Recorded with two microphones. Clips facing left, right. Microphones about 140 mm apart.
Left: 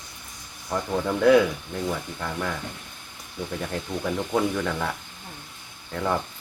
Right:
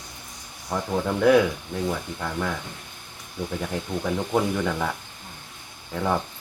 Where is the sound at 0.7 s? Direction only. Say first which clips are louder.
Even; 5° right (ahead or behind).